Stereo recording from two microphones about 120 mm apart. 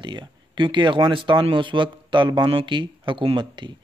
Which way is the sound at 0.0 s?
40° right (ahead or behind).